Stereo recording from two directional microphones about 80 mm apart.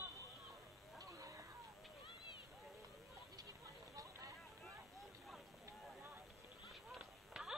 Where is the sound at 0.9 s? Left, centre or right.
Right.